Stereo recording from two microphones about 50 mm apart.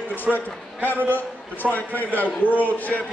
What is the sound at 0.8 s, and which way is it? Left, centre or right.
A man's voice, left.